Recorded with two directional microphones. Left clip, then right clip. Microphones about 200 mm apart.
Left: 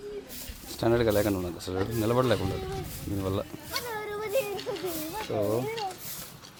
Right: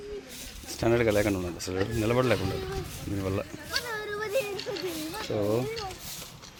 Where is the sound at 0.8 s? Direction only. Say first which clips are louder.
Even; centre (ahead or behind).